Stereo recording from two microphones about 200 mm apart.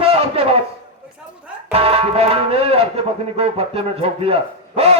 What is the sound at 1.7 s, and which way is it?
A man's voice, 30° right (ahead or behind).